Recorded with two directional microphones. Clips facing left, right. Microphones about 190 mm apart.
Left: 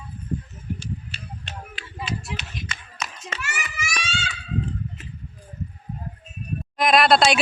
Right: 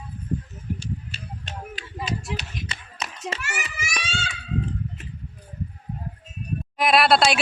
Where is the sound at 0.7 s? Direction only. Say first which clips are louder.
Right 1 dB; 40° right (ahead or behind).